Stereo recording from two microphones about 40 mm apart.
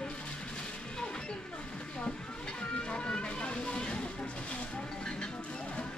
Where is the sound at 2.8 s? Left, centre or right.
Left.